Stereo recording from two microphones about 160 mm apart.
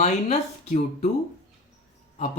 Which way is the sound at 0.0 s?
45° left (ahead or behind).